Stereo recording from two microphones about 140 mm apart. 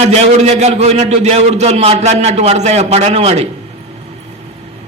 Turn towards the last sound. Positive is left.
turn(degrees=-45)  # may be behind; listen again after turning